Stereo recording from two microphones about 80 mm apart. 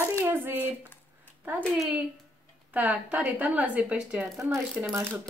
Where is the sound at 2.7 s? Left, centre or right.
Centre.